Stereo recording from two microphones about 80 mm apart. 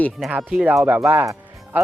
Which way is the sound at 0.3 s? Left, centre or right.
Centre.